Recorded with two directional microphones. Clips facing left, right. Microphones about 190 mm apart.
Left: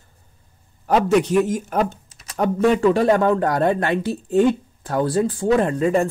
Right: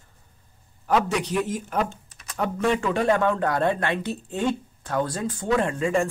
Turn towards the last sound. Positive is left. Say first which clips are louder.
# left 5 dB
turn(degrees=35)  # may be behind; listen again after turning